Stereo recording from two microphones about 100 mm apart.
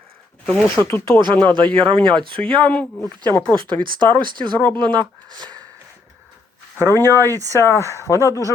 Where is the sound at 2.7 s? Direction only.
15° left (ahead or behind).